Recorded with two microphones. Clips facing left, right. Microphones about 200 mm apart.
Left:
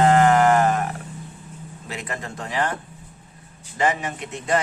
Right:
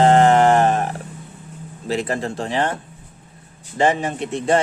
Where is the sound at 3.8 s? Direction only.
30° right (ahead or behind).